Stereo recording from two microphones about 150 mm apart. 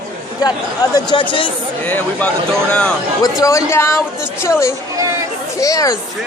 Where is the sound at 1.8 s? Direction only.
10° left (ahead or behind).